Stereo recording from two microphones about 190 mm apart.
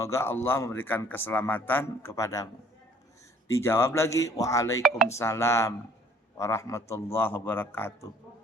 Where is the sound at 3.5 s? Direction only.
15° left (ahead or behind).